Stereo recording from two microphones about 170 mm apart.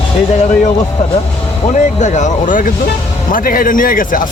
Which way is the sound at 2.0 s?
45° left (ahead or behind).